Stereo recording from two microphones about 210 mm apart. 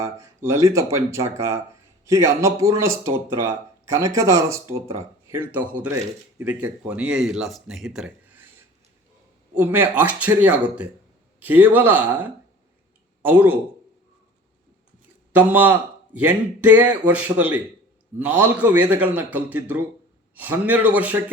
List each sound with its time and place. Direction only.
0.0 s speech: 15° right (ahead or behind)
9.6 s speech: 10° right (ahead or behind)
15.3 s speech: 10° right (ahead or behind)